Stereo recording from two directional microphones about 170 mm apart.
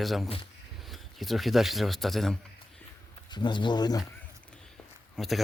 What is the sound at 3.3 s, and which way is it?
Speech, 25° left (ahead or behind).